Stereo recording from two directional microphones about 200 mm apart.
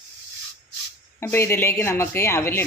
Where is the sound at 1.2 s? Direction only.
15° left (ahead or behind).